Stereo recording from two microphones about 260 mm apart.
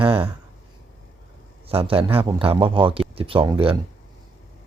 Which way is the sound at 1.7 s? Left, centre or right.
Right.